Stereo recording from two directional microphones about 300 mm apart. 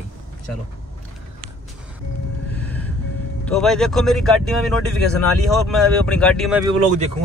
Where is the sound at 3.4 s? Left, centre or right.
Centre.